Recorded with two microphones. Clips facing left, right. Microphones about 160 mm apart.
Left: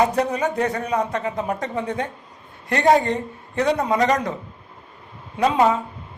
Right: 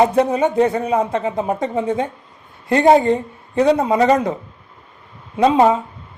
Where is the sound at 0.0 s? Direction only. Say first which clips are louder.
Right 5 dB; 25° right (ahead or behind).